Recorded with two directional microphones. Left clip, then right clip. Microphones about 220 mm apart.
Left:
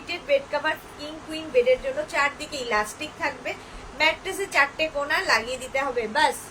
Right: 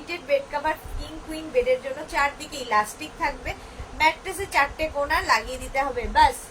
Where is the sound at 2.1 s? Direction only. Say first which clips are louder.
Right 2 dB; 15° left (ahead or behind).